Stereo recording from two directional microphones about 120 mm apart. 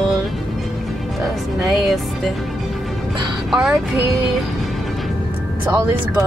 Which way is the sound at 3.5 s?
5° right (ahead or behind).